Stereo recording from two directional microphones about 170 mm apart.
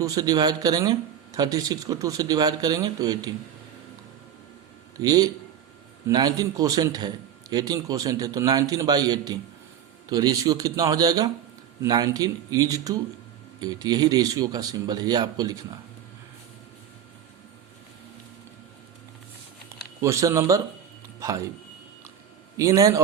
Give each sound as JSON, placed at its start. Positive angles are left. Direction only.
{"t": 0.0, "sound": "speech", "side_deg": -20}
{"t": 4.9, "sound": "speech", "side_deg": -20}
{"t": 20.0, "sound": "speech", "side_deg": -15}
{"t": 22.5, "sound": "speech", "side_deg": -20}